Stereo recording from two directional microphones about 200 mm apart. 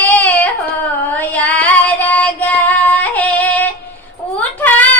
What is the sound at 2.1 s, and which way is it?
Female singing, 5° left (ahead or behind).